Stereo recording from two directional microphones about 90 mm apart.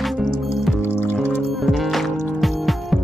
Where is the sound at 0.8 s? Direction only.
25° left (ahead or behind).